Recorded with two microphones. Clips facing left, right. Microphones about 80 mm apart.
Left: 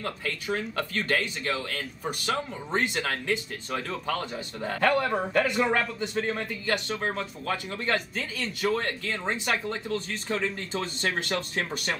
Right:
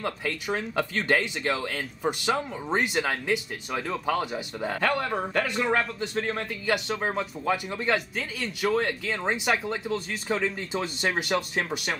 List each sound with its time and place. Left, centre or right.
0.0 s speech: centre